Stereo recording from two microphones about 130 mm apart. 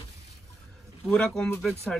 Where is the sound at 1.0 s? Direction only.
5° left (ahead or behind).